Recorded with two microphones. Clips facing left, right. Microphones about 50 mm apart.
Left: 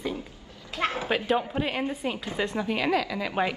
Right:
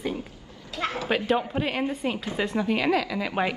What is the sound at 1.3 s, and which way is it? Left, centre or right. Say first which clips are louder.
Speech: right 1 dB; centre.